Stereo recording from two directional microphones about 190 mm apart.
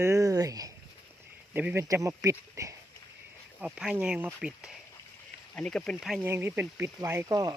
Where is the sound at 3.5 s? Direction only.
5° right (ahead or behind).